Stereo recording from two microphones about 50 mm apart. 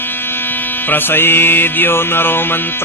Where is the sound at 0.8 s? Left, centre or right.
Left.